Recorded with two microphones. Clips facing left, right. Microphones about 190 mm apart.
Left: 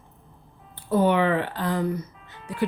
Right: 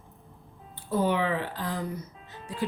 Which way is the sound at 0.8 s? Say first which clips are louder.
Left 5 dB; 65° left (ahead or behind).